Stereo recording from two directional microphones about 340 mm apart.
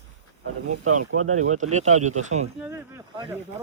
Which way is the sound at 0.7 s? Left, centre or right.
Right.